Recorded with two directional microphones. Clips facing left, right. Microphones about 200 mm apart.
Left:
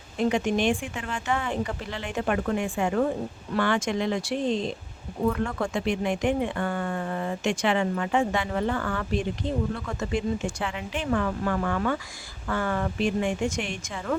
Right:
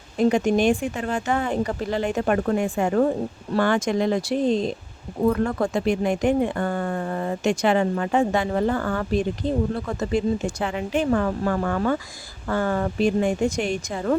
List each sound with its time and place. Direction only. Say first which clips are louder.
0.2 s speech: right 5 dB; 40° right (ahead or behind)